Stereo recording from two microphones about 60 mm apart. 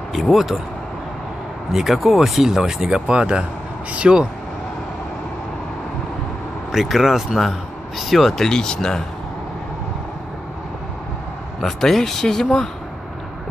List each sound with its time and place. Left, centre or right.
0.1 s speech: centre
1.7 s speech: centre
6.7 s speech: centre
11.6 s speech: centre